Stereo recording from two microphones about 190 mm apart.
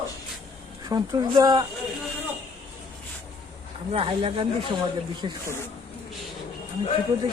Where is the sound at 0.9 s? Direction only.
20° right (ahead or behind).